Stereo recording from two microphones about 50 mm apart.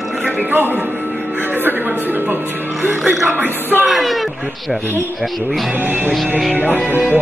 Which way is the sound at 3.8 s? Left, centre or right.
Centre.